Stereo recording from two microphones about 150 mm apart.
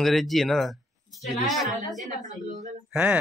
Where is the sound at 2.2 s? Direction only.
55° right (ahead or behind).